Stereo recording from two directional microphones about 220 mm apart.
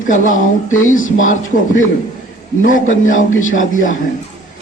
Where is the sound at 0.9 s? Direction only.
35° left (ahead or behind).